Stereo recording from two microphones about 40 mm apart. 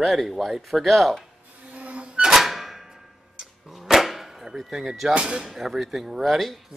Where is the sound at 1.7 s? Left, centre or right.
Right.